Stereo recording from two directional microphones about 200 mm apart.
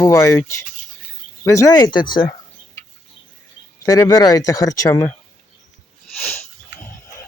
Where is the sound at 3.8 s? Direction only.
15° left (ahead or behind).